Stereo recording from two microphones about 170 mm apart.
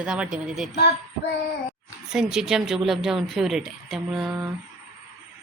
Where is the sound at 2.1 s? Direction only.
5° right (ahead or behind).